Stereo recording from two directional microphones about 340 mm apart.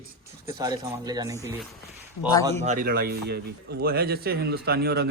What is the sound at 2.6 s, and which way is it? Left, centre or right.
Speech, right.